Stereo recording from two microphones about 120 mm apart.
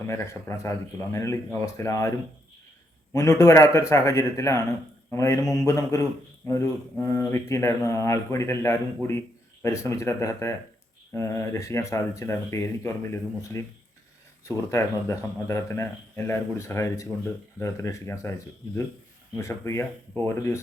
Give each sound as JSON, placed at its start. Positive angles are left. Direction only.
{"t": 0.0, "sound": "speech", "side_deg": 20}